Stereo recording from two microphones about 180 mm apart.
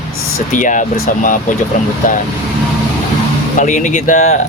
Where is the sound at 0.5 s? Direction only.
45° left (ahead or behind).